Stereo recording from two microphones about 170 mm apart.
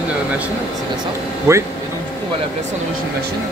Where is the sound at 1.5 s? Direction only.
15° right (ahead or behind).